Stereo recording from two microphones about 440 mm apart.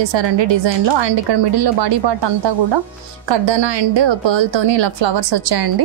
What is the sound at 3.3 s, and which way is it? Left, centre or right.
A woman's voice, right.